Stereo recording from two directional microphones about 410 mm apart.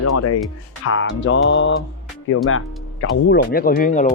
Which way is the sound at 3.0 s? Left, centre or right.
Left.